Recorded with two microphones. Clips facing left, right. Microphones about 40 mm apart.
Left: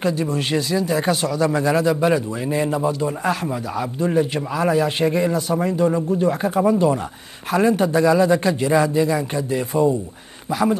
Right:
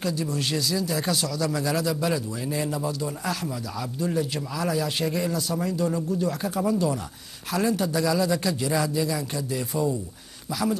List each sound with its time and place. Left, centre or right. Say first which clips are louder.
0.0 s a man's voice: left 6 dB; left